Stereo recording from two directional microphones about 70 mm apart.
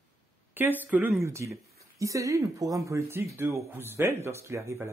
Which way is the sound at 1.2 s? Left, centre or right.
Right.